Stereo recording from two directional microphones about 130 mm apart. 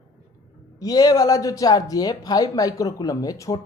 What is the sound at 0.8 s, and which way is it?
Speech, 30° left (ahead or behind).